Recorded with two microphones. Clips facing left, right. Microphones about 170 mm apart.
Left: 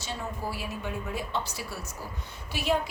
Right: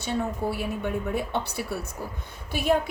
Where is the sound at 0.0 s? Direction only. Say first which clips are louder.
Right 7 dB; 55° right (ahead or behind).